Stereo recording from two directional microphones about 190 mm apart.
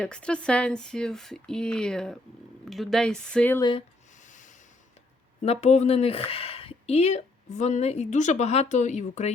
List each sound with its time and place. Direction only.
0.0 s speech: 5° left (ahead or behind)
3.6 s speech: 25° left (ahead or behind)
4.2 s sanding: 40° left (ahead or behind)
5.4 s speech: 35° left (ahead or behind)